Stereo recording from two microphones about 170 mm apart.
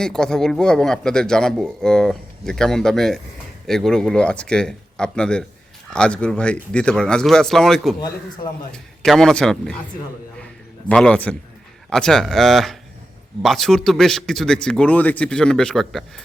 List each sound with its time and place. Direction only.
0.0 s a man's voice: 5° left (ahead or behind)
7.9 s a man's voice: 25° left (ahead or behind)
8.7 s a man's voice: 5° left (ahead or behind)
10.8 s a man's voice: 5° left (ahead or behind)